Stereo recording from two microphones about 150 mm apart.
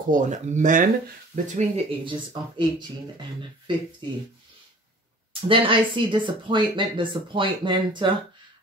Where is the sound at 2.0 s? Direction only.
35° right (ahead or behind).